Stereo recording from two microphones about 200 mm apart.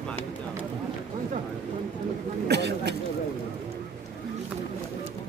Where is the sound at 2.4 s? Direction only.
55° right (ahead or behind).